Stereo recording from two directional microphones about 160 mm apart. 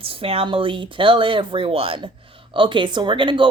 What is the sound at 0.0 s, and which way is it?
A woman's voice, 35° right (ahead or behind).